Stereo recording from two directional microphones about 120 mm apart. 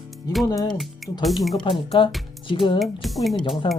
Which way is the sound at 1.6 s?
45° left (ahead or behind).